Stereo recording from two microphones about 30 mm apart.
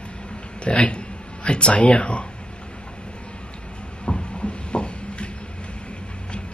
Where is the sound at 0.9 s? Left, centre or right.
Left.